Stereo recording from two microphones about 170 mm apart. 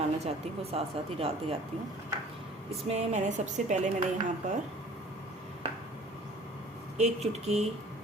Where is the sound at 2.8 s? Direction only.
40° right (ahead or behind).